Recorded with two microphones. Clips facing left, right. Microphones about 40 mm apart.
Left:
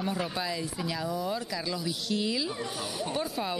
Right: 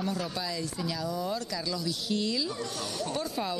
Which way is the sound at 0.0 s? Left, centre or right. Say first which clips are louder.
Left 1 dB; left.